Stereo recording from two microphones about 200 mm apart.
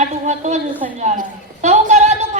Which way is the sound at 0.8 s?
35° right (ahead or behind).